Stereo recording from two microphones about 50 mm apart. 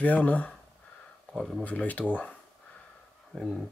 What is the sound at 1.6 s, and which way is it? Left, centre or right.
Speech, left.